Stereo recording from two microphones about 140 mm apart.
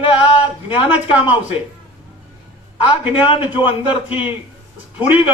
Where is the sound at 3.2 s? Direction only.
35° left (ahead or behind).